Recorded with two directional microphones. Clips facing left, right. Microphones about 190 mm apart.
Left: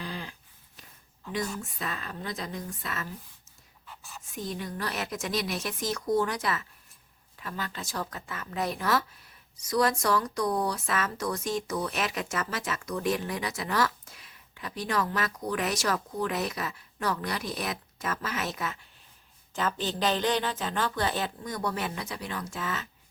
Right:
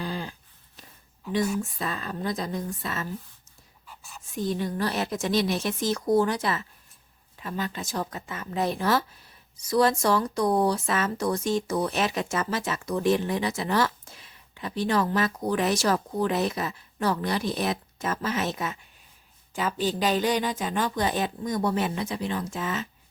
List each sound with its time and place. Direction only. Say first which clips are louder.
0.0 s a sound: right 5 dB; 35° right (ahead or behind)
1.8 s a woman's voice: right 5 dB; 35° right (ahead or behind)
3.8 s whispering: even; centre (ahead or behind)
4.4 s speech: right 7 dB; 30° right (ahead or behind)
19.5 s a woman's voice: right 3 dB; 10° right (ahead or behind)